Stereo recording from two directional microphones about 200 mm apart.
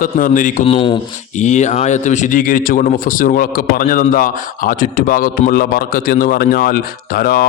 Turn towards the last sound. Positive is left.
turn(degrees=50)  # may be behind; listen again after turning